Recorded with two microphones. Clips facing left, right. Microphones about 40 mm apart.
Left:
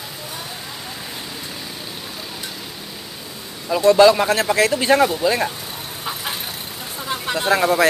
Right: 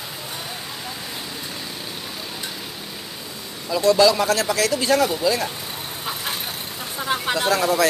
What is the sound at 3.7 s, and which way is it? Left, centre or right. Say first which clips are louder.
Speech: left 4 dB; left.